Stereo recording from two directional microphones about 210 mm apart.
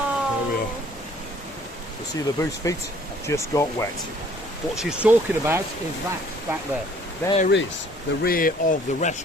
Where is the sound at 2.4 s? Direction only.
15° left (ahead or behind).